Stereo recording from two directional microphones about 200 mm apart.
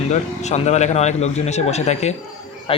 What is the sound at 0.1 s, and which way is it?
Speech, 35° left (ahead or behind).